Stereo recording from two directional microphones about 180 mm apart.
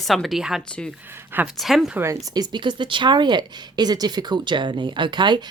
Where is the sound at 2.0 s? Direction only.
15° right (ahead or behind).